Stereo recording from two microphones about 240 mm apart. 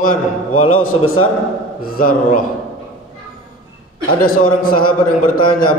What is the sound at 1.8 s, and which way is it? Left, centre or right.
Mantra, left.